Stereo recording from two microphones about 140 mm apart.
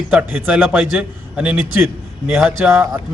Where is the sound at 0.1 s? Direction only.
10° right (ahead or behind).